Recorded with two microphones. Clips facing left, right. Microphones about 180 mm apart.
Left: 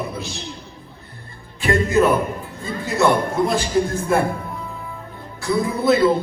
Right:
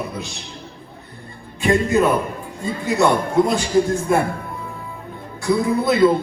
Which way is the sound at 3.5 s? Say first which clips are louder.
Right 2 dB; 15° right (ahead or behind).